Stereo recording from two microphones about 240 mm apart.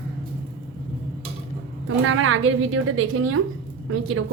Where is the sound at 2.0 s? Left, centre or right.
Right.